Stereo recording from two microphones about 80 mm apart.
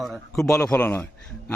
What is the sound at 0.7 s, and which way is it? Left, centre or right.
Speech, left.